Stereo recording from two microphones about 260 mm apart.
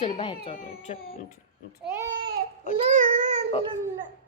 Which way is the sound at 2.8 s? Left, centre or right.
Right.